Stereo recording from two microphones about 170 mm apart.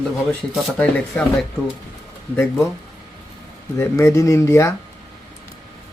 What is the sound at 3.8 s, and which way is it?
Speech, 15° left (ahead or behind).